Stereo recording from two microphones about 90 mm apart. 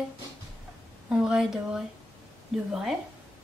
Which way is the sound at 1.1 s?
5° right (ahead or behind).